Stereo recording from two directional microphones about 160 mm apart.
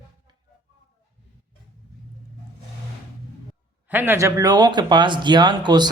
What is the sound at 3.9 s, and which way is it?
Speech, 15° right (ahead or behind).